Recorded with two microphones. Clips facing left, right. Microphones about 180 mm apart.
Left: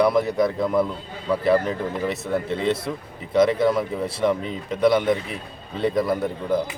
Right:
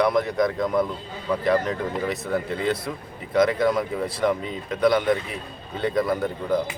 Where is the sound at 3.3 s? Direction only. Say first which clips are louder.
Left 2 dB; 30° left (ahead or behind).